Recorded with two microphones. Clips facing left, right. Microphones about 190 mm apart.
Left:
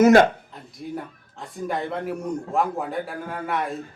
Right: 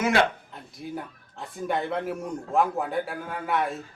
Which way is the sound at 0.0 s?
45° left (ahead or behind).